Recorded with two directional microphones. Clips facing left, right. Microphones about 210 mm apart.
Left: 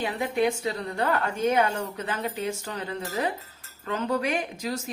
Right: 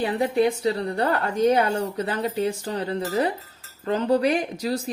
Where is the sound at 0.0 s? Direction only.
40° right (ahead or behind).